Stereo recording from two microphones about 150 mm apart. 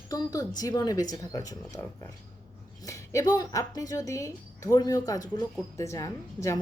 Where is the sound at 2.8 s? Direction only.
20° left (ahead or behind).